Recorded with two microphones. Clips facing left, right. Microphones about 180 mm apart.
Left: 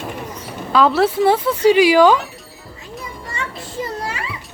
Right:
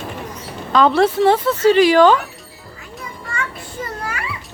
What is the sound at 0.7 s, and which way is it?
A woman's voice, 5° left (ahead or behind).